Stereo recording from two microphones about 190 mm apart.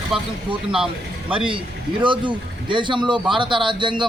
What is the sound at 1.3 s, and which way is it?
Speech, 25° right (ahead or behind).